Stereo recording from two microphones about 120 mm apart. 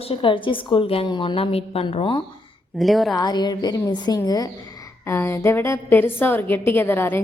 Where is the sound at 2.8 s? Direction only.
Centre (ahead or behind).